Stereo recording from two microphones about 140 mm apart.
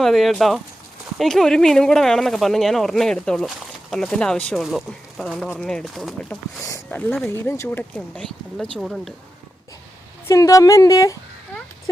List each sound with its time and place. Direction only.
0.0 s speech: centre (ahead or behind); by 7.9 s 15° left (ahead or behind)
7.9 s speech: 5° left (ahead or behind)
10.2 s speech: 25° left (ahead or behind)